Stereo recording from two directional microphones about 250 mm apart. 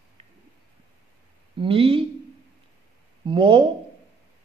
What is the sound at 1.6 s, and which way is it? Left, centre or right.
Speech, right.